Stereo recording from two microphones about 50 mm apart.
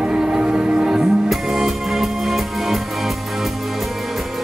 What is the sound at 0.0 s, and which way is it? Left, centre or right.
Music, centre.